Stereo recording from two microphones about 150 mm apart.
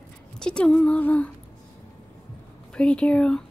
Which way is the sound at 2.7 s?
5° left (ahead or behind).